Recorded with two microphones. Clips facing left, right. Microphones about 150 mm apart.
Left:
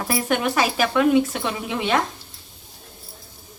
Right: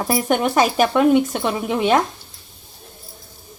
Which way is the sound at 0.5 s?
45° right (ahead or behind).